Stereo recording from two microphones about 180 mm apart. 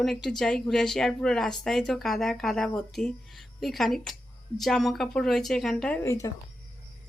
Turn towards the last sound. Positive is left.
turn(degrees=20)  # may be behind; listen again after turning